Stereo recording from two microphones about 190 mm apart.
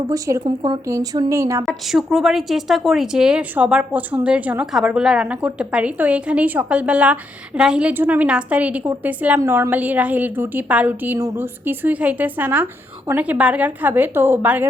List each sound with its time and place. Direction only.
0.1 s a woman's voice: 20° right (ahead or behind)
1.6 s a woman's voice: centre (ahead or behind)